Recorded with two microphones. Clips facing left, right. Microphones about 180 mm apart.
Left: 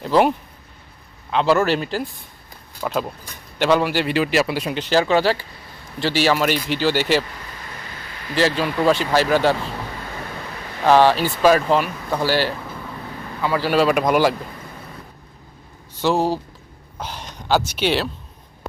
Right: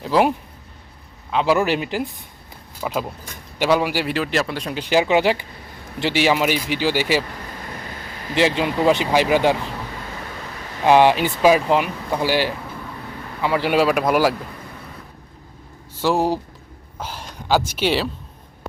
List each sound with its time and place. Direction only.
0.0 s a man's voice: 5° right (ahead or behind)
2.8 s a man's voice: 5° right (ahead or behind)
4.7 s speech: 10° right (ahead or behind)
8.4 s speech: 20° right (ahead or behind)
10.8 s speech: 15° right (ahead or behind)
13.7 s a man's voice: 5° right (ahead or behind)
16.0 s speech: 10° right (ahead or behind)